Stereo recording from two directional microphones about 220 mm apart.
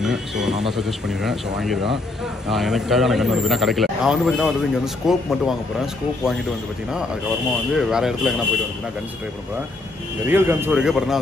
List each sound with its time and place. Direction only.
0.0 s a man's voice: centre (ahead or behind)
7.7 s a man's voice: centre (ahead or behind)
10.2 s a man's voice: 10° right (ahead or behind)